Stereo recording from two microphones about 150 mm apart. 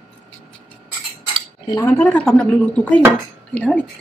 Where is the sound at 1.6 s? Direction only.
20° left (ahead or behind).